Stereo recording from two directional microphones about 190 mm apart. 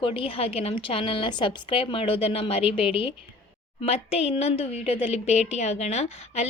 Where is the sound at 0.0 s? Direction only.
30° left (ahead or behind).